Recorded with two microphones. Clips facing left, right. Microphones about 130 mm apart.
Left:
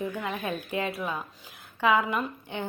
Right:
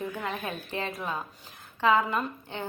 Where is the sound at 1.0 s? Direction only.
15° right (ahead or behind).